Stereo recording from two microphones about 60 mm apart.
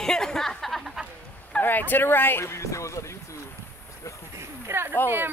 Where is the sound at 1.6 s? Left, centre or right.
Left.